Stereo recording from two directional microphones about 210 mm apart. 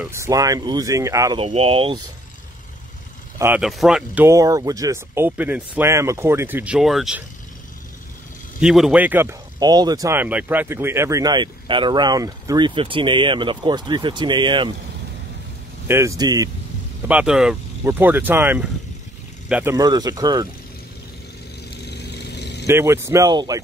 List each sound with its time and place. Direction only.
0.0 s speech: 15° right (ahead or behind)
1.4 s speech: 30° right (ahead or behind)
3.3 s speech: 10° right (ahead or behind)
8.5 s speech: centre (ahead or behind); by 14.8 s 25° right (ahead or behind)
15.9 s speech: 15° right (ahead or behind)
17.1 s speech: 5° right (ahead or behind)
21.8 s vehicle: 50° left (ahead or behind)
22.7 s speech: 10° right (ahead or behind)